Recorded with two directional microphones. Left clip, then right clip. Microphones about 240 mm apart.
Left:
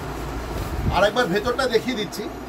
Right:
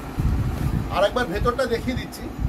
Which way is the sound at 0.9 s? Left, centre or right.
Centre.